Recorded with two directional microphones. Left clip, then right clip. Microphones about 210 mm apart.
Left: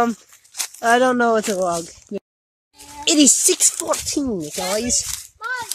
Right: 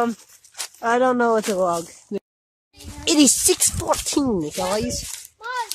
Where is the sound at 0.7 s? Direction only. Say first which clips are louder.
Left 3 dB; 15° left (ahead or behind); by 4.0 s centre (ahead or behind).